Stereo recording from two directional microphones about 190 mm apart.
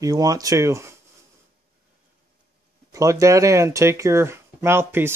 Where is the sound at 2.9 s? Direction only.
15° right (ahead or behind).